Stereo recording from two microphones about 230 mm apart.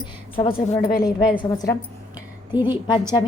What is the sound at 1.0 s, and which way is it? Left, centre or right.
Speech, centre.